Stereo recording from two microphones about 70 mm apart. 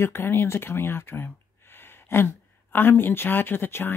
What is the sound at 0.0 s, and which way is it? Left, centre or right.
Speech, left.